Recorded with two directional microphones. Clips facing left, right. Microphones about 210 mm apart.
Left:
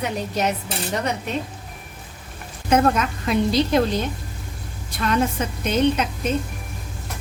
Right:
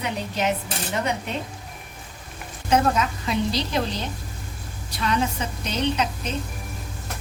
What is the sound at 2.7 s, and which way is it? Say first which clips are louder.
A woman's voice: left 3 dB; 55° left (ahead or behind).